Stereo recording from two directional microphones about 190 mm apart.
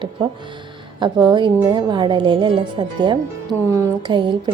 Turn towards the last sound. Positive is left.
turn(degrees=-25)  # may be behind; listen again after turning